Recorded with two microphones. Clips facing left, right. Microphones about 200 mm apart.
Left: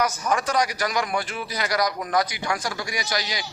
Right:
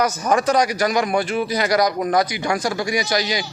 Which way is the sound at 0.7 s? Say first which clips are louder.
Right 6 dB; 20° right (ahead or behind).